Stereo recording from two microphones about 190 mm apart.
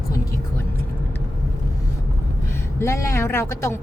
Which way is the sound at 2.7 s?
15° left (ahead or behind).